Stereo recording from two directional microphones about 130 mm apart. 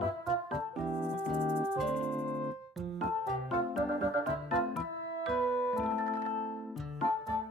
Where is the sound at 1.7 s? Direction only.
Centre (ahead or behind).